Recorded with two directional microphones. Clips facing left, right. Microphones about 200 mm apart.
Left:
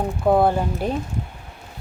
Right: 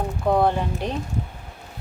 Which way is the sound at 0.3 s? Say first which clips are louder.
Left 3 dB; 5° left (ahead or behind).